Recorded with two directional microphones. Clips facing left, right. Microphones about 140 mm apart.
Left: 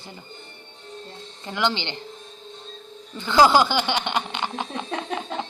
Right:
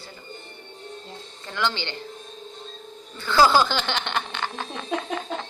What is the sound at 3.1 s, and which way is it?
Speech, 20° left (ahead or behind).